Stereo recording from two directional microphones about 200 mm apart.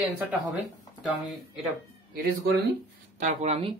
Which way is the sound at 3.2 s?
35° right (ahead or behind).